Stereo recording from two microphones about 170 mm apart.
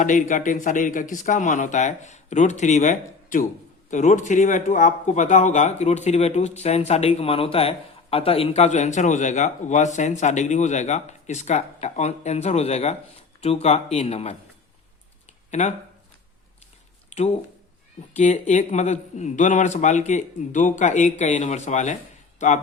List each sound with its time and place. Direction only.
0.0 s speech: 50° left (ahead or behind)
15.4 s speech: 45° left (ahead or behind)
17.1 s a sound: 40° left (ahead or behind)
18.1 s speech: 45° left (ahead or behind)